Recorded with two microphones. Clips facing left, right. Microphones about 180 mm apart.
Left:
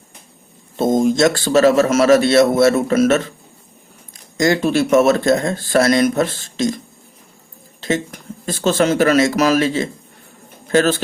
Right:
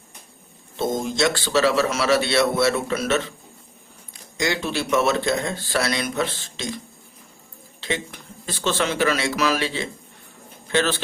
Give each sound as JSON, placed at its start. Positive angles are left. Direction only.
{"t": 0.8, "sound": "a man's voice", "side_deg": 50}
{"t": 4.4, "sound": "a man's voice", "side_deg": 45}
{"t": 7.8, "sound": "a man's voice", "side_deg": 45}